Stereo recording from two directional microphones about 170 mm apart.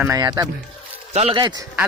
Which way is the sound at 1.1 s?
35° right (ahead or behind).